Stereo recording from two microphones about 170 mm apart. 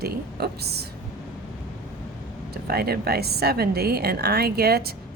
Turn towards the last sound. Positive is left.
turn(degrees=-65)  # may be behind; listen again after turning